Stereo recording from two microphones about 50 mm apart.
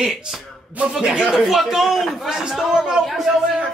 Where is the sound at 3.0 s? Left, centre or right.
Centre.